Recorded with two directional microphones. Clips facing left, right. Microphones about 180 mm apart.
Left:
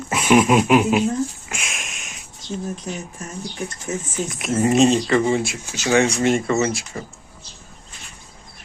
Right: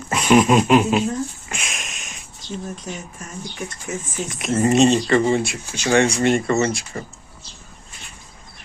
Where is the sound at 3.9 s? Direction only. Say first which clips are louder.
Left 2 dB; 25° left (ahead or behind).